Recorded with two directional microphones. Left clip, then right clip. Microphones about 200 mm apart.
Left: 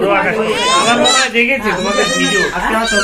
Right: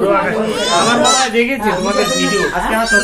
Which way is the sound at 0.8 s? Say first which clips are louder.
Even; 20° right (ahead or behind).